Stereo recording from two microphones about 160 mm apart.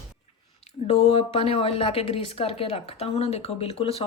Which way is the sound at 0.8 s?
40° left (ahead or behind).